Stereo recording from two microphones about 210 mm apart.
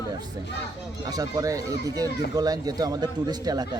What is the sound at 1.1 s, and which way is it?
A child's voice, 20° right (ahead or behind).